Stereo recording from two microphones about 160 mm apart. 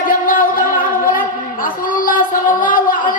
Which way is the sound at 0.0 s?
60° left (ahead or behind).